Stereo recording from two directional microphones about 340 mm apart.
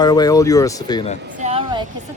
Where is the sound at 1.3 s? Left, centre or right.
Centre.